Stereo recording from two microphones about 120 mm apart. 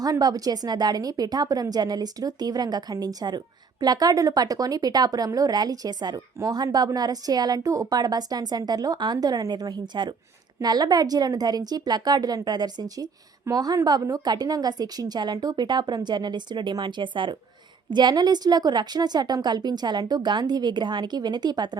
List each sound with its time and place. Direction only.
0.0 s a woman's voice: 35° right (ahead or behind)